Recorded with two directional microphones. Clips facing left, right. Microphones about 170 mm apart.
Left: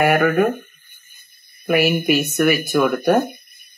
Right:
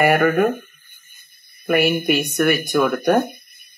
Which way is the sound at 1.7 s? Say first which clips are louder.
Left 1 dB; centre (ahead or behind).